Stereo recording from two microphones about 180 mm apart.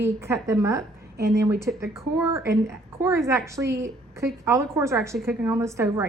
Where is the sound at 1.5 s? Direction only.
15° right (ahead or behind).